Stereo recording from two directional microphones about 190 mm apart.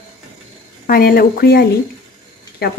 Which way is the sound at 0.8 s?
50° left (ahead or behind).